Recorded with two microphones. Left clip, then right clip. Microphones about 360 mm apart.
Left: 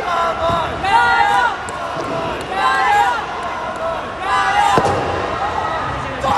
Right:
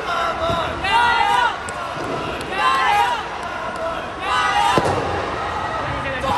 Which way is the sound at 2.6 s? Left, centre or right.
Left.